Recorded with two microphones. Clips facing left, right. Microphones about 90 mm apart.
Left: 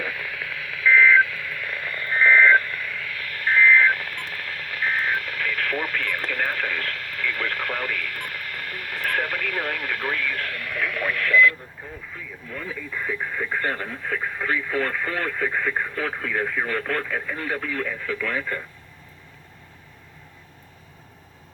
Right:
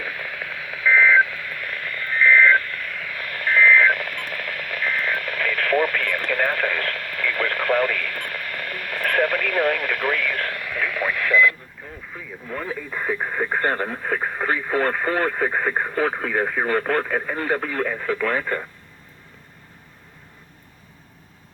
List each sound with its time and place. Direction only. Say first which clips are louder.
0.0 s telephone dialing: even; 15° right (ahead or behind)
1.5 s radio: even; centre (ahead or behind)
1.9 s a sound: right 1 dB; 30° left (ahead or behind)
2.7 s telephone dialing: even; centre (ahead or behind)
3.3 s a sound: right 1 dB; 70° right (ahead or behind); by 10.3 s 85° right
10.6 s radio: right 2 dB; centre (ahead or behind)
12.5 s speech: right 4 dB; 40° right (ahead or behind)